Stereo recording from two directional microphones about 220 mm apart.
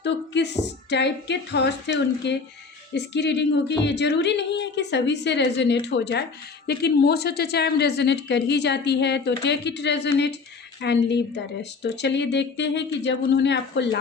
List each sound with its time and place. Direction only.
0.0 s a woman's voice: 50° left (ahead or behind)